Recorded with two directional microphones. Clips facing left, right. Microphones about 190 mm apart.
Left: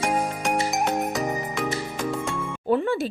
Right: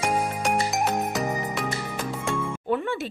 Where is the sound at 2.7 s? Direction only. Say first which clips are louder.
Left 5 dB; 35° left (ahead or behind).